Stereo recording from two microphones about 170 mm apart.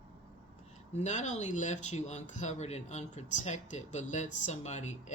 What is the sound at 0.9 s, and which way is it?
Speech, 45° left (ahead or behind).